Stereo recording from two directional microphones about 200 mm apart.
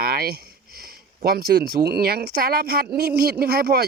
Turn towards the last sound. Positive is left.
turn(degrees=-50)  # may be behind; listen again after turning